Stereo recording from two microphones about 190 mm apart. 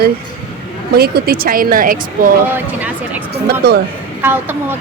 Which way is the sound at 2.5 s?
10° right (ahead or behind).